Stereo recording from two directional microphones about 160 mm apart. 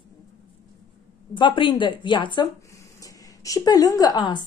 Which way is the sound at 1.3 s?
30° left (ahead or behind).